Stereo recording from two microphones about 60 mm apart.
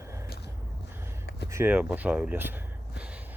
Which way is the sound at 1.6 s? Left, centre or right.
Right.